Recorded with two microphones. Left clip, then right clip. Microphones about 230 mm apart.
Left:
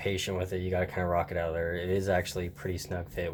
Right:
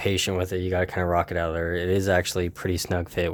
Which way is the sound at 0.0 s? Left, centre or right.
Right.